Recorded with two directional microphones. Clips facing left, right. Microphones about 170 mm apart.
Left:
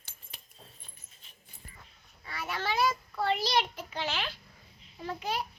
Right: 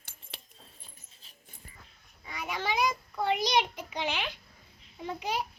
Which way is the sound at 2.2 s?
15° right (ahead or behind).